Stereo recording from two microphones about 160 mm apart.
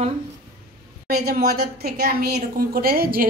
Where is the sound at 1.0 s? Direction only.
75° right (ahead or behind).